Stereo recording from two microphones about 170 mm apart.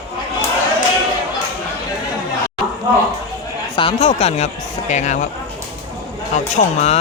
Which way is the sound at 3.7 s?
35° left (ahead or behind).